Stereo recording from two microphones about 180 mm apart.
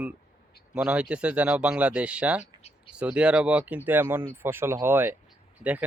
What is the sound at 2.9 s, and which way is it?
Speech, 5° right (ahead or behind).